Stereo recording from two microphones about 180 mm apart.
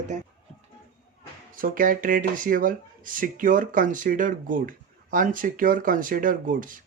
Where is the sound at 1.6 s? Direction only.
50° right (ahead or behind).